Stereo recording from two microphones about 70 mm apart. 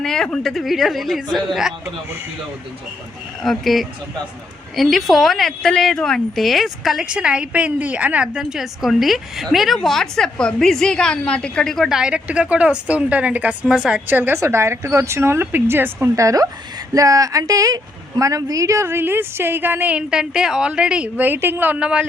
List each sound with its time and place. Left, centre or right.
0.0 s a woman's voice: centre
3.4 s a woman's voice: centre
7.0 s a woman's voice: centre
11.9 s speech: centre
14.1 s a woman's voice: right
14.3 s speech: right
16.1 s speech: right
18.9 s a woman's voice: right; by 21.1 s centre
21.2 s a woman's voice: right
21.8 s speech: centre